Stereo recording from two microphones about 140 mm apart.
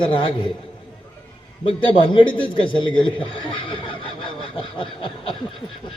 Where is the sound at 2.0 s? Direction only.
35° left (ahead or behind).